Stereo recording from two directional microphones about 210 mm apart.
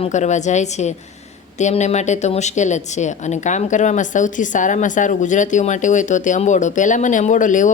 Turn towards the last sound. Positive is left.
turn(degrees=35)  # may be behind; listen again after turning